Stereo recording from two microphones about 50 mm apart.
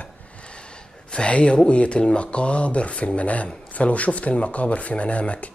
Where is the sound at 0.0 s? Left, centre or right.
Left.